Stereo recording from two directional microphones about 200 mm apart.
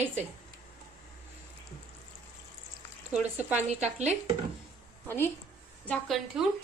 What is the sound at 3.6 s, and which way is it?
Speech, 35° right (ahead or behind).